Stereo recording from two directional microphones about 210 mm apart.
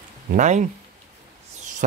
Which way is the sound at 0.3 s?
35° right (ahead or behind).